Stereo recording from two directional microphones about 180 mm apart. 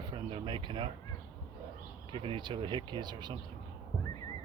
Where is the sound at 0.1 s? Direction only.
25° right (ahead or behind).